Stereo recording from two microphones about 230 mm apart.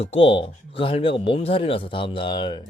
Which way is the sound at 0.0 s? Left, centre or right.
Left.